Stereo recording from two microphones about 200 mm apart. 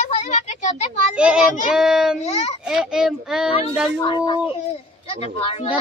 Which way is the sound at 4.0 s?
25° left (ahead or behind).